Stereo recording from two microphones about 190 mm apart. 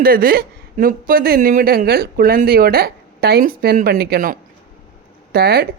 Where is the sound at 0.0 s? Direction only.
50° right (ahead or behind).